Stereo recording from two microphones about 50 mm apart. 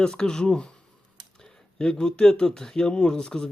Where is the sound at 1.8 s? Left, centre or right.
Centre.